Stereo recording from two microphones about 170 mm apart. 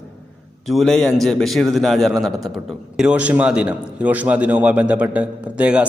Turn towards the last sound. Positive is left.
turn(degrees=-5)  # may be behind; listen again after turning